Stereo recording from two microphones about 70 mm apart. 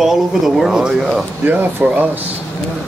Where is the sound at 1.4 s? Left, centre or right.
Right.